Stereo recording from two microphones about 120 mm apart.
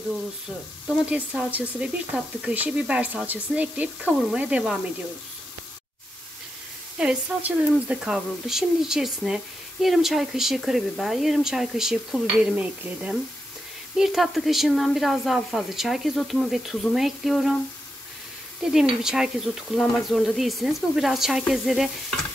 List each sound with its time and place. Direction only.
1.5 s speech: 10° right (ahead or behind)
7.0 s speech: 10° right (ahead or behind)
18.6 s speech: 5° right (ahead or behind)